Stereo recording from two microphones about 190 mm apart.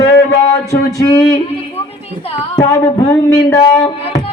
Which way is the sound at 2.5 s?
15° left (ahead or behind).